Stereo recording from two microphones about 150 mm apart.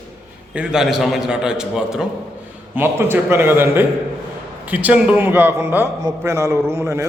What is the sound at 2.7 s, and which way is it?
A man's voice, 15° right (ahead or behind).